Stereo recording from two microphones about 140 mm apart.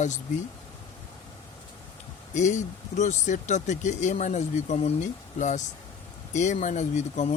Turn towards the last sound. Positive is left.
turn(degrees=55)  # may be behind; listen again after turning